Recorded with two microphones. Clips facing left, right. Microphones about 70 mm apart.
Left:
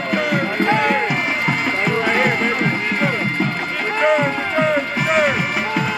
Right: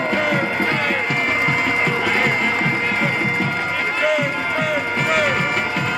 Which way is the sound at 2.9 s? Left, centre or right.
Centre.